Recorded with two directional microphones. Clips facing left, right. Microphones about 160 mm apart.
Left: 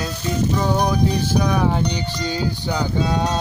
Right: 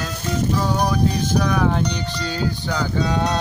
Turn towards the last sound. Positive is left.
turn(degrees=15)  # may be behind; listen again after turning